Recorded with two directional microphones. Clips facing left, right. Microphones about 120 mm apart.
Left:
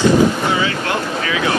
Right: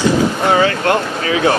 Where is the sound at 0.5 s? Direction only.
50° right (ahead or behind).